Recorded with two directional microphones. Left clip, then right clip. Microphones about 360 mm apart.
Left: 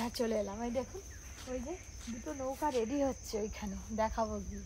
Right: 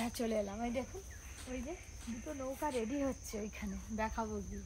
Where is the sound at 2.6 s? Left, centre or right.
Centre.